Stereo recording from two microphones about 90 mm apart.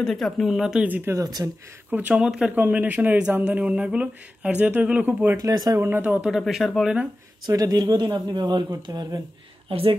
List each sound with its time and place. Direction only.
0.0 s speech: 5° left (ahead or behind)
0.8 s speech: 20° right (ahead or behind)
1.1 s speech: 45° right (ahead or behind)
1.9 s speech: 20° right (ahead or behind)
2.5 s speech: 20° right (ahead or behind)
5.4 s speech: 45° right (ahead or behind)
5.8 s speech: 25° right (ahead or behind)
6.2 s speech: 5° right (ahead or behind)
7.4 s speech: 45° right (ahead or behind)
9.7 s speech: 90° right